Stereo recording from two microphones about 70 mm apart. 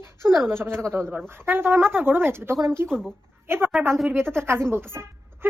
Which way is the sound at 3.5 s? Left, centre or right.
Right.